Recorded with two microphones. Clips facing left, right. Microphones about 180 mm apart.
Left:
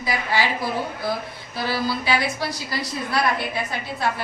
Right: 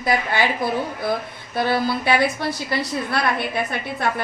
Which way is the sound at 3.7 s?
55° right (ahead or behind).